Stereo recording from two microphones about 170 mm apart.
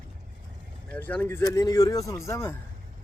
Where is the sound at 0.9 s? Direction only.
10° left (ahead or behind).